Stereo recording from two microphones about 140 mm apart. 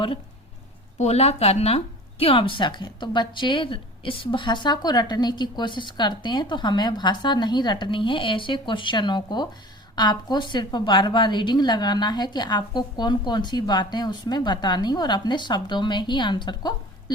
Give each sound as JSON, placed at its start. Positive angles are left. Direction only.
{"t": 0.9, "sound": "speech", "side_deg": 50}